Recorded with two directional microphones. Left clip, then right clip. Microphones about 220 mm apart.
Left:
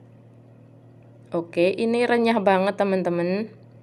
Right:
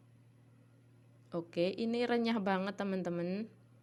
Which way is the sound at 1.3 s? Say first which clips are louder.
Left 14 dB; 40° right (ahead or behind).